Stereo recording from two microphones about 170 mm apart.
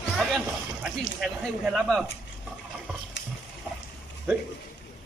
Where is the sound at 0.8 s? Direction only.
5° right (ahead or behind).